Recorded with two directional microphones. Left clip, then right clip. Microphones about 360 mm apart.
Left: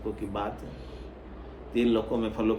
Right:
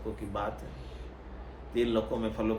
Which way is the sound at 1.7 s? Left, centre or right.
Centre.